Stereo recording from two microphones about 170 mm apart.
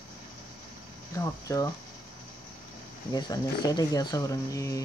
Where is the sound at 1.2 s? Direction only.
20° left (ahead or behind).